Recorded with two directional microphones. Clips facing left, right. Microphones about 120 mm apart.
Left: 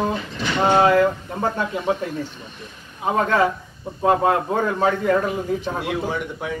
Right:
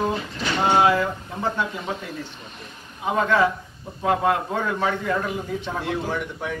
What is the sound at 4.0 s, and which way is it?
A man's voice, 35° left (ahead or behind).